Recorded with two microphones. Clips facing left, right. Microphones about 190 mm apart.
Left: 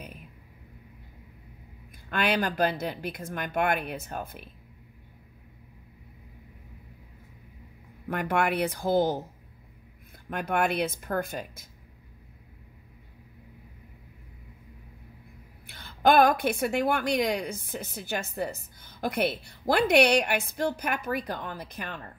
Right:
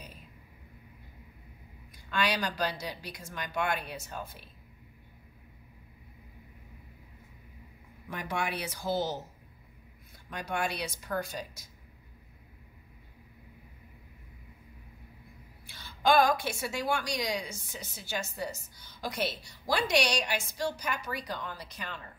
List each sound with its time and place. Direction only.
2.0 s a woman's voice: 55° left (ahead or behind)
8.1 s a woman's voice: 55° left (ahead or behind)
10.3 s a woman's voice: 55° left (ahead or behind)
15.6 s a woman's voice: 55° left (ahead or behind)